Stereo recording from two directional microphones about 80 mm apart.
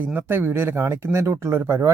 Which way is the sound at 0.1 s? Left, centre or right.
Right.